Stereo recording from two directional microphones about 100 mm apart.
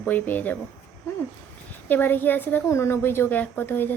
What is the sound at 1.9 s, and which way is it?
A woman's voice, 20° left (ahead or behind).